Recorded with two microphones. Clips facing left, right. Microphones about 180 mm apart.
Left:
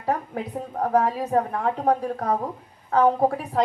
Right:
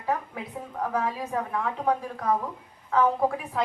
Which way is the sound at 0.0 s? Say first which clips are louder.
Left 4 dB; 40° left (ahead or behind).